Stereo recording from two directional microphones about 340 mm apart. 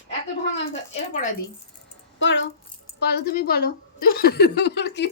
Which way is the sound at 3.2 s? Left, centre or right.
Left.